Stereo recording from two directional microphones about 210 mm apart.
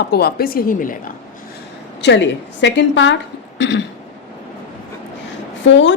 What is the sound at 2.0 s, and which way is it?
A woman's voice, 55° left (ahead or behind).